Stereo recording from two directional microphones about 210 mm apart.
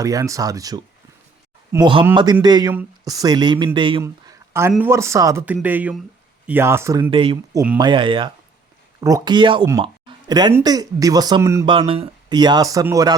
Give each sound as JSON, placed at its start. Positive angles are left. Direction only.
{"t": 0.0, "sound": "speech", "side_deg": -15}
{"t": 7.1, "sound": "speech", "side_deg": -25}